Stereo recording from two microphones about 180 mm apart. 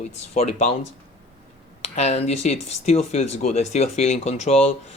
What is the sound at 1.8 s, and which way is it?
Speech, 35° left (ahead or behind).